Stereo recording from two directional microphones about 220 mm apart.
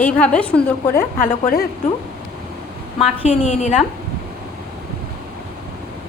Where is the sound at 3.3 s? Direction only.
30° left (ahead or behind).